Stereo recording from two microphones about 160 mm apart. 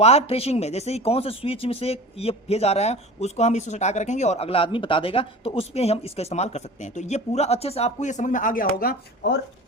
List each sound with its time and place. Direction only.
0.0 s speech: 40° left (ahead or behind); by 9.0 s 65° left (ahead or behind)